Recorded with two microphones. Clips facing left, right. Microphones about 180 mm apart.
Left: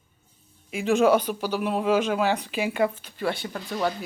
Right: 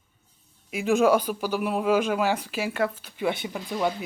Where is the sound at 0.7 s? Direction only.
5° right (ahead or behind).